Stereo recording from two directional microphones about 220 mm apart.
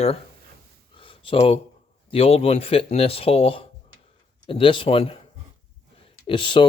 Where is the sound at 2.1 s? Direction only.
25° left (ahead or behind).